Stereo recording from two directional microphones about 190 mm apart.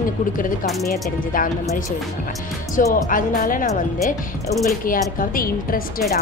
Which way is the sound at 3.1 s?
45° left (ahead or behind).